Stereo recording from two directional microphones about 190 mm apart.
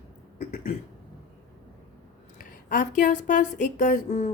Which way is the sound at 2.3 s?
45° left (ahead or behind).